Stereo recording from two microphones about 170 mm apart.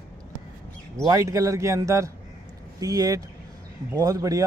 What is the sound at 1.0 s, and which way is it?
Speech, 20° right (ahead or behind).